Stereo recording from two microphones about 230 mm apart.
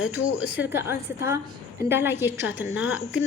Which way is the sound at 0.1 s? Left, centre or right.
Centre.